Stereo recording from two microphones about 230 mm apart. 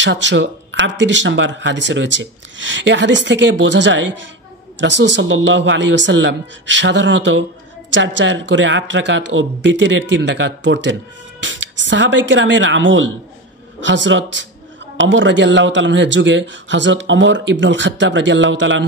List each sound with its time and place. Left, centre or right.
0.0 s speech: right